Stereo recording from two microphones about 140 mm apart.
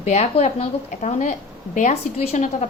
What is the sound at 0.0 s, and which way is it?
A woman's voice, 50° left (ahead or behind).